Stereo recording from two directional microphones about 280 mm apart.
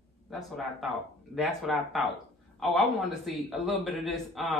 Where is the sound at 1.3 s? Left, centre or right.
Centre.